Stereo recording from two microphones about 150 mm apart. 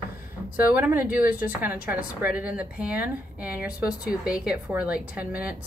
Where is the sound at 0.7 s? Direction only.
10° right (ahead or behind).